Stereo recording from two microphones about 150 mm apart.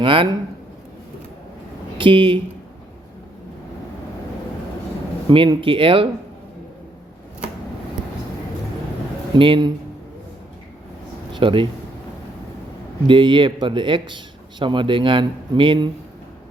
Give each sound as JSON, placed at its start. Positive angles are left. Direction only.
{"t": 0.0, "sound": "speech", "side_deg": -35}
{"t": 2.0, "sound": "speech", "side_deg": -35}
{"t": 5.3, "sound": "speech", "side_deg": -35}
{"t": 9.3, "sound": "speech", "side_deg": -35}
{"t": 11.3, "sound": "speech", "side_deg": -35}
{"t": 13.1, "sound": "speech", "side_deg": -35}